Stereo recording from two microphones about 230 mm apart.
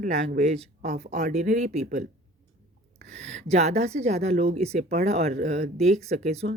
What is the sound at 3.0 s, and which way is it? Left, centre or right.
A woman's voice, right.